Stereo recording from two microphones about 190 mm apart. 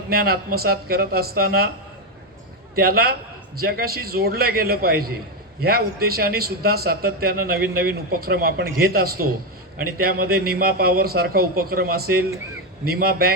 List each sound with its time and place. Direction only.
0.1 s a man's voice: 55° right (ahead or behind)
2.7 s a man's voice: 55° right (ahead or behind)